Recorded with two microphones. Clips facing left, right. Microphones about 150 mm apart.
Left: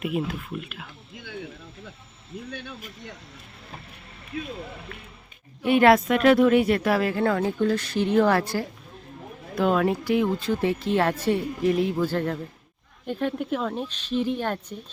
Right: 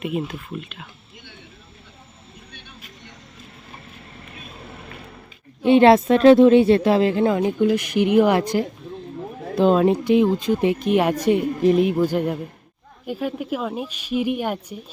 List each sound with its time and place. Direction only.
0.0 s speech: 5° left (ahead or behind)
5.6 s speech: 25° right (ahead or behind)